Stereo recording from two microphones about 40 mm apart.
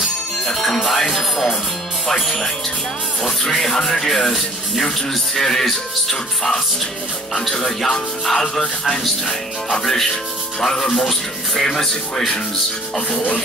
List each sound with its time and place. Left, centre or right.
0.5 s music: centre
2.0 s speech: centre
3.4 s speech: centre
10.6 s speech: centre
13.1 s speech: left